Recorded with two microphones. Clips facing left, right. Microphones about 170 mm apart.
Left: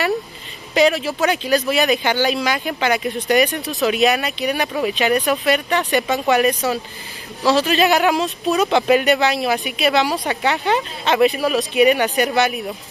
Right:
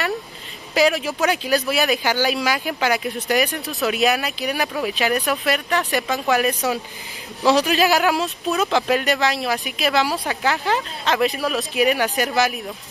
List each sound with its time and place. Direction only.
0.7 s speech: centre (ahead or behind)
7.4 s speech: 15° right (ahead or behind)
7.7 s speech: centre (ahead or behind)